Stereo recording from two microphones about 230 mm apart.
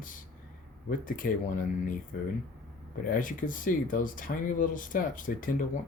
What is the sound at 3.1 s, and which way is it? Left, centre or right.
Speech, left.